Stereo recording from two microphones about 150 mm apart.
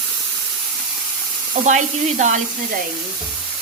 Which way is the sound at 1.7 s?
55° right (ahead or behind).